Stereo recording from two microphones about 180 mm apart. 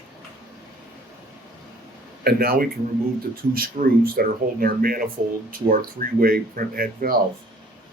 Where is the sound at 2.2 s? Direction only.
55° right (ahead or behind).